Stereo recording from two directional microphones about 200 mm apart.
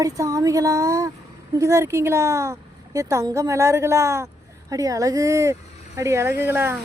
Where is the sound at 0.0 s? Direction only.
15° right (ahead or behind).